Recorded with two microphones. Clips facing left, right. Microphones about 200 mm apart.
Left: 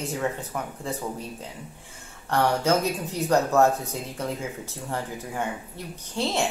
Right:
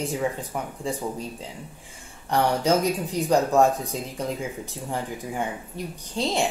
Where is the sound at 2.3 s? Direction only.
15° right (ahead or behind).